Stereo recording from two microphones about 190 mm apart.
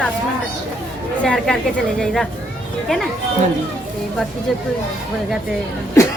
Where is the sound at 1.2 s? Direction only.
5° left (ahead or behind).